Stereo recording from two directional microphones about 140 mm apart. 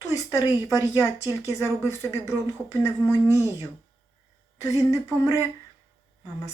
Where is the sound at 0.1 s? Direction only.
20° left (ahead or behind).